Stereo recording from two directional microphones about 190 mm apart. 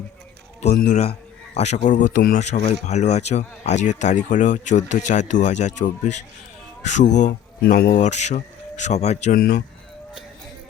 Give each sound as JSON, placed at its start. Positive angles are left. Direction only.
{"t": 0.9, "sound": "speech", "side_deg": 35}
{"t": 9.4, "sound": "a man's voice", "side_deg": 55}